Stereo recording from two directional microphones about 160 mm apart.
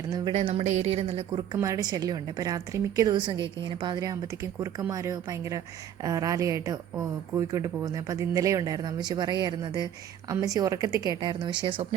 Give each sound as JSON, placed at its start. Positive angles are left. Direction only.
{"t": 0.3, "sound": "a woman's voice", "side_deg": -40}
{"t": 1.5, "sound": "speech", "side_deg": -20}